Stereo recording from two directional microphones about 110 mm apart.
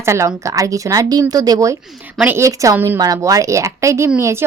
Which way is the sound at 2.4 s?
30° right (ahead or behind).